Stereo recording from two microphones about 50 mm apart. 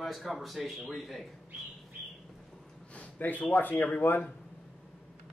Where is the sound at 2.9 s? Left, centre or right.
Left.